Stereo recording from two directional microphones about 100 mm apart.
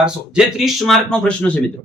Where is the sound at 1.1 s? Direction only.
10° left (ahead or behind).